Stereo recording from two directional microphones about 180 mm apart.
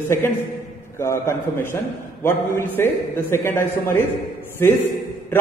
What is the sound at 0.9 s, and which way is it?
A man's voice, 15° left (ahead or behind).